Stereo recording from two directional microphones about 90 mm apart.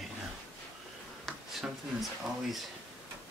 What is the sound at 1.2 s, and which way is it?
Speech, centre (ahead or behind).